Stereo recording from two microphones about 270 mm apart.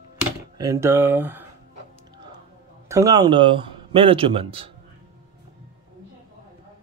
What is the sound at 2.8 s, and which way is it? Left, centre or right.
Speech, centre.